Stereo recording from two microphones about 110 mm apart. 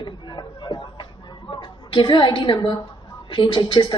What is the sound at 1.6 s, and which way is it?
A woman's voice, 45° left (ahead or behind).